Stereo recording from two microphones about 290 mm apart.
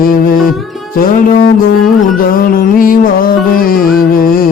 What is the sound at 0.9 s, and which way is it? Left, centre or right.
Music, left.